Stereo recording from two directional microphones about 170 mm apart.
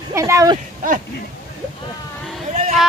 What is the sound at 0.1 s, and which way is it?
Speech, 15° right (ahead or behind).